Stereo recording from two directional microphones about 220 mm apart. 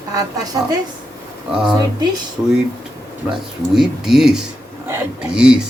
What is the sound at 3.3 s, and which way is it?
Speech, centre (ahead or behind).